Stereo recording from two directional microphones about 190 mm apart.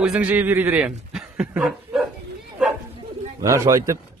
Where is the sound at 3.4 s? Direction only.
15° right (ahead or behind).